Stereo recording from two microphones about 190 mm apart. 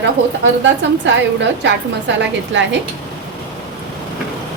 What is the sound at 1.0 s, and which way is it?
A woman's voice, 70° right (ahead or behind).